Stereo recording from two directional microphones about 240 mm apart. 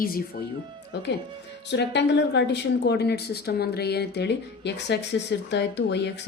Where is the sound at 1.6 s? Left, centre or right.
Left.